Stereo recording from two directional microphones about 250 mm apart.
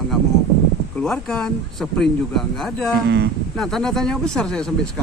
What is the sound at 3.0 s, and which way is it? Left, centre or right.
Speech, right.